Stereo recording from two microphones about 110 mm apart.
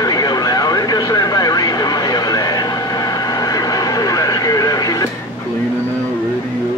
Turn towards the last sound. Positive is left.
turn(degrees=35)  # may be behind; listen again after turning